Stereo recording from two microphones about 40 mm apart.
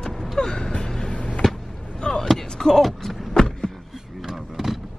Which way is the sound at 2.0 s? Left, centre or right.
Left.